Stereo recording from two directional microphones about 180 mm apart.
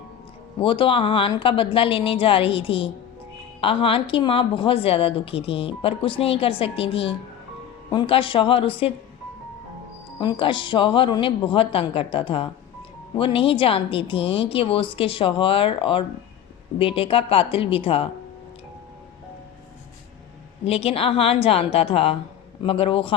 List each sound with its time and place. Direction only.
0.6 s a woman's voice: 30° left (ahead or behind)
10.2 s a woman's voice: 25° left (ahead or behind)
20.7 s a woman's voice: 35° left (ahead or behind)